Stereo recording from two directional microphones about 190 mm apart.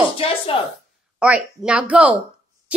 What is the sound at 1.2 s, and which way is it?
Speech, 5° right (ahead or behind).